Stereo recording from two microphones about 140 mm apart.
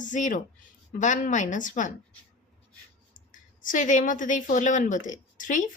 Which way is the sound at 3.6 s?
65° left (ahead or behind).